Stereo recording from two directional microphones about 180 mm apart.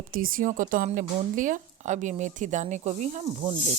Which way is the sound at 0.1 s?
50° right (ahead or behind).